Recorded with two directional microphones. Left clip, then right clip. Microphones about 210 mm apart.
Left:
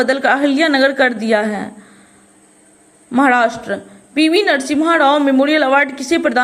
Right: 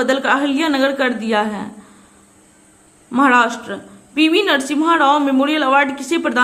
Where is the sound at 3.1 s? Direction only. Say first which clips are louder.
Left 1 dB; 20° left (ahead or behind).